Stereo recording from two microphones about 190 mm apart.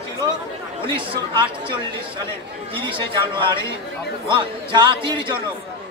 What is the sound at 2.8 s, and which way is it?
A man's voice, 25° right (ahead or behind).